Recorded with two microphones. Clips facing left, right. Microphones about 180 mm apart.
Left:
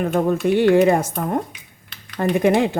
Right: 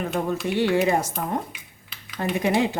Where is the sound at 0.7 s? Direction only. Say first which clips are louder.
Left 7 dB; 55° left (ahead or behind).